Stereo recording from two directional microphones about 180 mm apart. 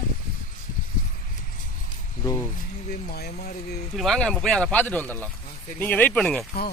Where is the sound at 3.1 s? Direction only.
60° left (ahead or behind).